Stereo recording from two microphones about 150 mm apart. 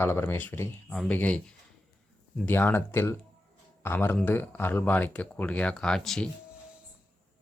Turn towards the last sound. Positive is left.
turn(degrees=5)  # may be behind; listen again after turning